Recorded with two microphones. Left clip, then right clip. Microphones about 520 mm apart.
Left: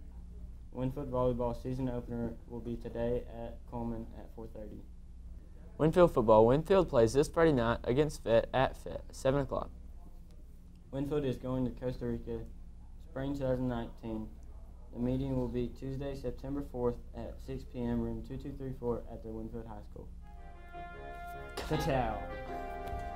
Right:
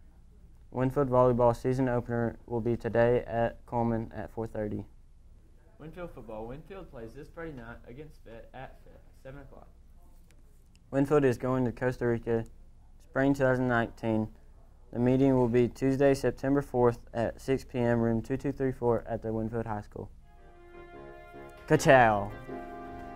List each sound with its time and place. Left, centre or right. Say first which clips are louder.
0.7 s speech: right 10 dB; right
5.8 s speech: left 18 dB; left
10.9 s speech: right 10 dB; right
20.7 s music: left 2 dB; centre
21.7 s speech: right 13 dB; right